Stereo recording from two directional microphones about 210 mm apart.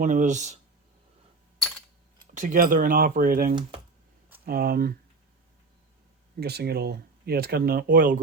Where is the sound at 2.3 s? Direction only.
40° right (ahead or behind).